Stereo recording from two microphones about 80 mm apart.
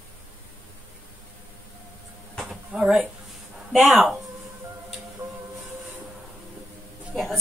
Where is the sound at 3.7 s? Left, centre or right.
Centre.